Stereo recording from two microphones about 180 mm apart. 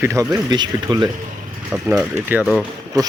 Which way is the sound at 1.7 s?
5° right (ahead or behind).